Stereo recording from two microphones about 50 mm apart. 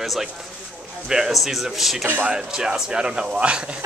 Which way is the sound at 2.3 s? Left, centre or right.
Centre.